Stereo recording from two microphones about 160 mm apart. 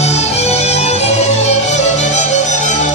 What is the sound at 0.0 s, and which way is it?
Music, 40° left (ahead or behind).